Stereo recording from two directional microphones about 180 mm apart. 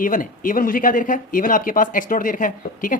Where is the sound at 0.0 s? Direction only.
50° left (ahead or behind).